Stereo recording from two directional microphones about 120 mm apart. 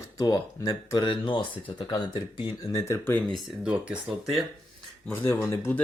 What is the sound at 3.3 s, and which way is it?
Speech, 5° right (ahead or behind).